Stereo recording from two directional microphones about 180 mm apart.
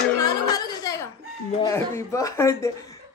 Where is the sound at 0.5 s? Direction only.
20° left (ahead or behind).